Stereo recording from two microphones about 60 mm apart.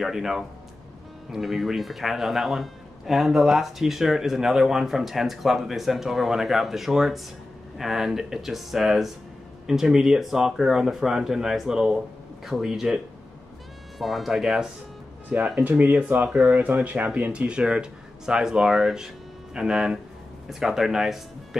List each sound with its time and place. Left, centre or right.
0.0 s speech: centre
15.2 s speech: centre
16.3 s speech: centre
16.6 s speech: right; by 21.2 s centre